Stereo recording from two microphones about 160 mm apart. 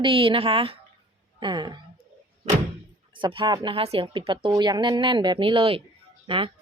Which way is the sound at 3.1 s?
30° right (ahead or behind).